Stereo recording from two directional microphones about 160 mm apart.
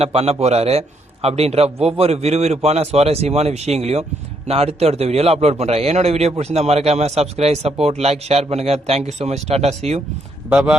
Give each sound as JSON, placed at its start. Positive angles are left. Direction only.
{"t": 0.0, "sound": "a man's voice", "side_deg": -40}
{"t": 10.5, "sound": "speech", "side_deg": -5}